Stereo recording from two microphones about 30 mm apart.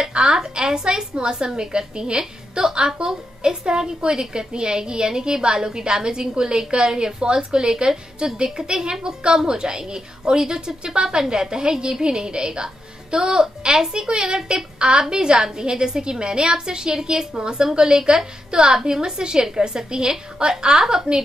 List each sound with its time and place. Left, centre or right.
0.0 s a woman's voice: right